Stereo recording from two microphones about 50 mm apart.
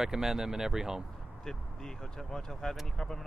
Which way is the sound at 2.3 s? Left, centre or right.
Centre.